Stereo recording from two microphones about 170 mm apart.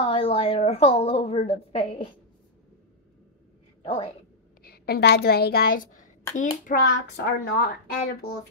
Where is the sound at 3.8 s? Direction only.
30° left (ahead or behind).